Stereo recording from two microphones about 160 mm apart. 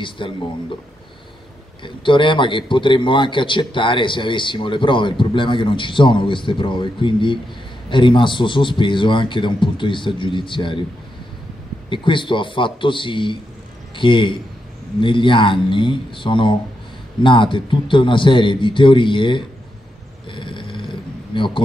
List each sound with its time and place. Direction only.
0.2 s a man's voice: 30° left (ahead or behind)
1.8 s a man's voice: 30° left (ahead or behind)
11.9 s a man's voice: 30° left (ahead or behind)
20.2 s snoring: 30° left (ahead or behind)